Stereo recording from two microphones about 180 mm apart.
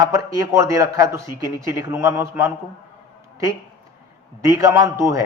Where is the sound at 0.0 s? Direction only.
20° right (ahead or behind).